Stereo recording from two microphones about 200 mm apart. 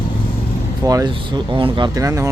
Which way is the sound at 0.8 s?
15° right (ahead or behind).